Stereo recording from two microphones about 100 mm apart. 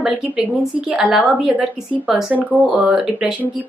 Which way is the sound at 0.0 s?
10° right (ahead or behind).